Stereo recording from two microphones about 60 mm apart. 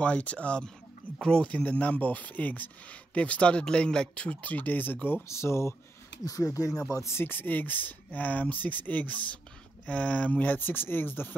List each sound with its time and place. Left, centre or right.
0.0 s speech: left
5.3 s speech: left
6.2 s speech: left
6.9 s speech: left
7.2 s speech: left